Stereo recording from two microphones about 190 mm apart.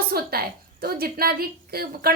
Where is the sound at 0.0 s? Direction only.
55° right (ahead or behind).